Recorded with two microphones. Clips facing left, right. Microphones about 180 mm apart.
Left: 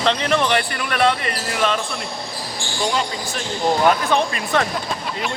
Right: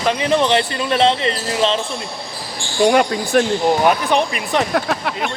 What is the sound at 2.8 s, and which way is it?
Speech, 60° right (ahead or behind).